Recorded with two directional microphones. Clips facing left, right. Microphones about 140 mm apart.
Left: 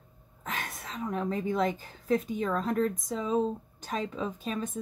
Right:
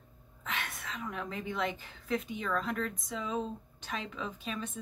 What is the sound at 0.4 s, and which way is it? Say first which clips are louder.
A woman's voice: left 2 dB; 40° left (ahead or behind).